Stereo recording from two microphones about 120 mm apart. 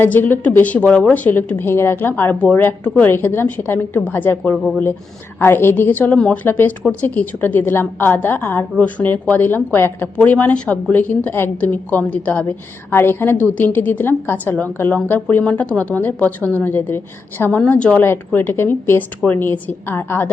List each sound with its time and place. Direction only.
0.0 s a woman's voice: 15° left (ahead or behind)